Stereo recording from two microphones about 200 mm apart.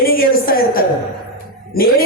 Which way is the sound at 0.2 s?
45° left (ahead or behind).